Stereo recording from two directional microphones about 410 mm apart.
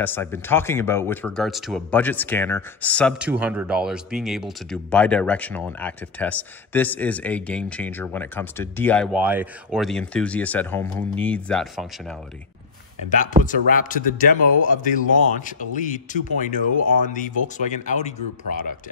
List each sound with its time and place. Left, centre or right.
0.0 s speech: centre
13.1 s speech: centre